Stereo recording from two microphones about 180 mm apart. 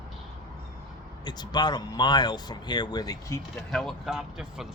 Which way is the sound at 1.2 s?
25° left (ahead or behind).